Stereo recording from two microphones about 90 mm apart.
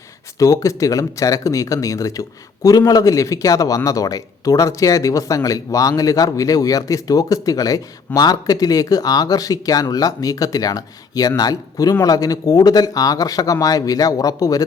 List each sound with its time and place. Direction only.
0.3 s speech: 40° left (ahead or behind)